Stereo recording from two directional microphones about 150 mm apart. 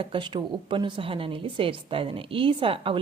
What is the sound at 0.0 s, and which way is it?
Speech, 35° right (ahead or behind).